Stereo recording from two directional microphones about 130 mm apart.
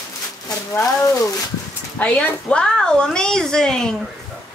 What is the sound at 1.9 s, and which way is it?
A woman's voice, 10° left (ahead or behind).